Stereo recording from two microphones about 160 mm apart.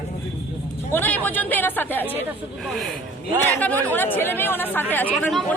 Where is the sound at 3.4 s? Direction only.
10° left (ahead or behind).